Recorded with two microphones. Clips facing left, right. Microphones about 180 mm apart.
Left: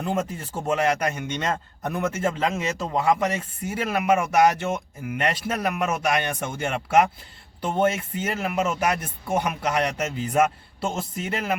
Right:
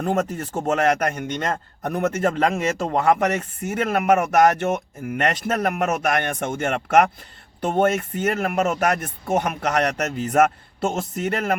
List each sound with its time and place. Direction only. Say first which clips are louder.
0.0 s speech: right 4 dB; 50° right (ahead or behind)
0.8 s speech: right 3 dB; 60° right (ahead or behind)